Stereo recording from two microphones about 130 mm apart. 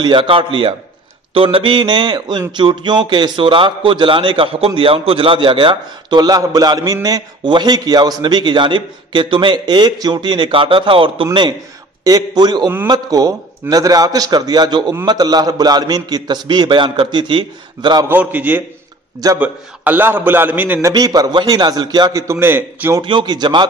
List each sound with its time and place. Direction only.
0.0 s a man's voice: 40° right (ahead or behind)
12.0 s a man's voice: 30° right (ahead or behind)
18.0 s a man's voice: 15° right (ahead or behind)
20.9 s a man's voice: 30° right (ahead or behind)
23.0 s a man's voice: 35° right (ahead or behind)